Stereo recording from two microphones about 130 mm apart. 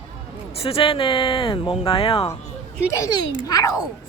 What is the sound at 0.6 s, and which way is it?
Speech, 45° left (ahead or behind).